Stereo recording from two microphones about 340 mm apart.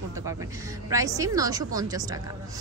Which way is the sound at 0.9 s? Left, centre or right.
Centre.